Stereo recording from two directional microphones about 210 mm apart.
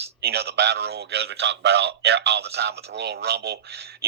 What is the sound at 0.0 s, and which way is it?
Speech, 50° right (ahead or behind).